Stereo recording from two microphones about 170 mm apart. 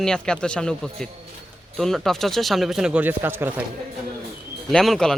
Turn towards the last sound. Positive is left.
turn(degrees=0)  # may be behind; listen again after turning